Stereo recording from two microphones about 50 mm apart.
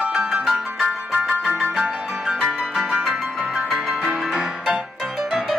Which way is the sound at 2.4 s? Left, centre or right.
Centre.